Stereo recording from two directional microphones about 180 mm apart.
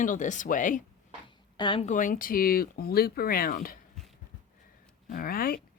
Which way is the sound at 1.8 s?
45° left (ahead or behind).